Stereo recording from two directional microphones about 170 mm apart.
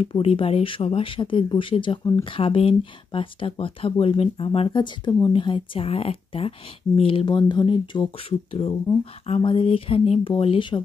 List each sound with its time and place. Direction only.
0.0 s speech: 35° left (ahead or behind)